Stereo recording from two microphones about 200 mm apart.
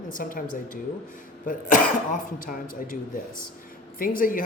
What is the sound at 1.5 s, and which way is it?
Cough, 40° left (ahead or behind).